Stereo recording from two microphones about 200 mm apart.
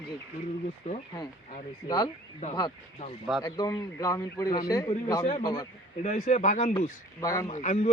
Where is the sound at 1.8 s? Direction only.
20° left (ahead or behind).